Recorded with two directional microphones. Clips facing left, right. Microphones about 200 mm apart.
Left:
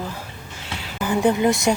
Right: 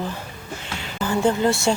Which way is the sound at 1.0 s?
15° left (ahead or behind).